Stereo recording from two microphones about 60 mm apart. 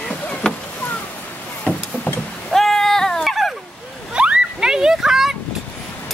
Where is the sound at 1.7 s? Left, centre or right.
Left.